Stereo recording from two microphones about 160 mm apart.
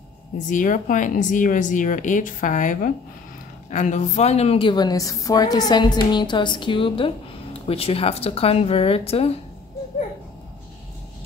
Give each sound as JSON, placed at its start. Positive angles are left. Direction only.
{"t": 0.5, "sound": "a woman's voice", "side_deg": 55}